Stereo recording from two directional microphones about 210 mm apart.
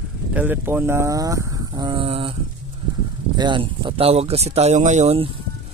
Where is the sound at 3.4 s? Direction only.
20° right (ahead or behind).